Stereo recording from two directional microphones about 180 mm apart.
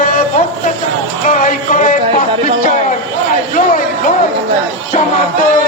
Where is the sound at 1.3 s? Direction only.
45° left (ahead or behind).